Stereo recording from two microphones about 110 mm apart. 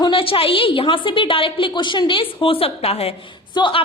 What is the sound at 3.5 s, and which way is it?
Speech, 50° left (ahead or behind).